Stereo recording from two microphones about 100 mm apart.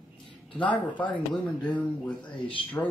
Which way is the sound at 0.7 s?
15° left (ahead or behind).